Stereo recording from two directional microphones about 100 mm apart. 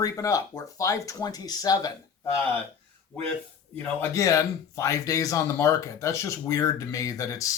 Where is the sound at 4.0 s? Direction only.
35° left (ahead or behind).